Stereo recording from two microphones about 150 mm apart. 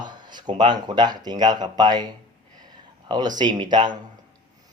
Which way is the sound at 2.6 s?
25° right (ahead or behind).